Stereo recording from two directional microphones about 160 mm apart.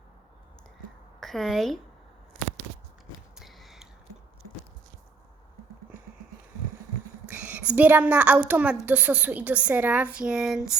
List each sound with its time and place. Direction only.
1.2 s a woman's voice: centre (ahead or behind)
3.3 s a sound: centre (ahead or behind)
7.3 s a woman's voice: 10° right (ahead or behind)